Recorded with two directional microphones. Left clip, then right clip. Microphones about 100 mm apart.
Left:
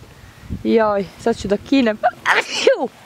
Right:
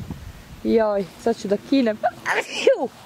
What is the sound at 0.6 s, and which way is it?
Speech, 45° left (ahead or behind).